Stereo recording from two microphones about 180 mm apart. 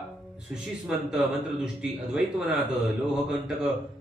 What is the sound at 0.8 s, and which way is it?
Speech, 5° right (ahead or behind).